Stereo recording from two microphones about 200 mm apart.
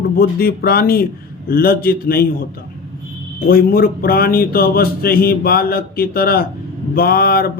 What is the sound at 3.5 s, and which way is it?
Speech, 50° left (ahead or behind).